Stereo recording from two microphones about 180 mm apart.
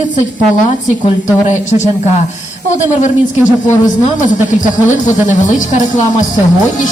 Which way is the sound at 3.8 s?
45° left (ahead or behind).